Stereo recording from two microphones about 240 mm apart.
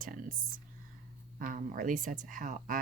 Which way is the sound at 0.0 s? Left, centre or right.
Right.